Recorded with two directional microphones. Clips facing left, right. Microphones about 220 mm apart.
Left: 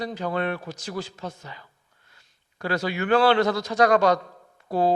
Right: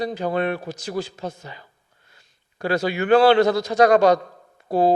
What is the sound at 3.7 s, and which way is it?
Speech, 30° right (ahead or behind).